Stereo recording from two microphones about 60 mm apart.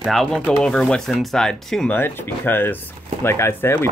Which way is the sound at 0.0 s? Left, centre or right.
Centre.